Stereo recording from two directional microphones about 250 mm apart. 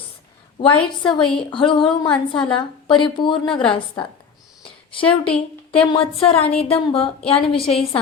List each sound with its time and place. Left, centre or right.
0.6 s a woman's voice: centre
1.0 s a woman's voice: centre
2.0 s a woman's voice: centre
2.5 s a woman's voice: centre
5.0 s a woman's voice: centre
5.7 s a woman's voice: left